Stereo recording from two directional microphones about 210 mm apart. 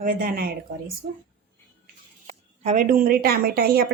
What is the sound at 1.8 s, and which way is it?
Speech, 35° right (ahead or behind).